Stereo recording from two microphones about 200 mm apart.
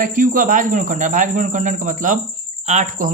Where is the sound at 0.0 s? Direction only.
40° right (ahead or behind).